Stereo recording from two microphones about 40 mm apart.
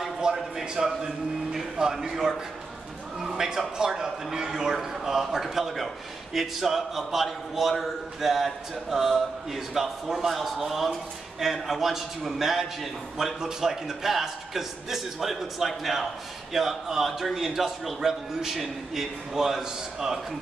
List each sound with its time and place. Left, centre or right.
0.4 s a man's voice: centre